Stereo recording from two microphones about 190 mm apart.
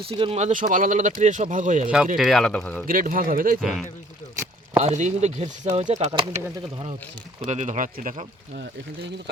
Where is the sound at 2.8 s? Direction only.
45° right (ahead or behind).